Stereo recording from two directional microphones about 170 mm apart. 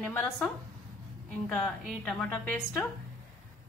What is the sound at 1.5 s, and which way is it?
A woman's voice, centre (ahead or behind).